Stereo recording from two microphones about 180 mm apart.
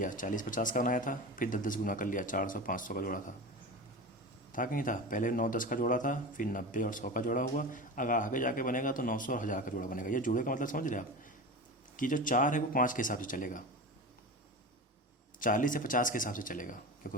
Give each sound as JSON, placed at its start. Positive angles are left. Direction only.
{"t": 0.0, "sound": "speech", "side_deg": 45}
{"t": 4.5, "sound": "speech", "side_deg": 50}
{"t": 15.4, "sound": "speech", "side_deg": 50}